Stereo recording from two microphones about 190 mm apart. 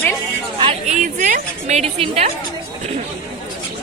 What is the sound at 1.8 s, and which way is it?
Speech, 30° right (ahead or behind).